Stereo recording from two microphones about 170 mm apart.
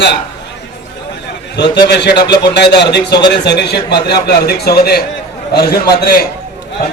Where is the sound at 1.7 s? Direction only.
85° left; by 5.0 s 65° left (ahead or behind).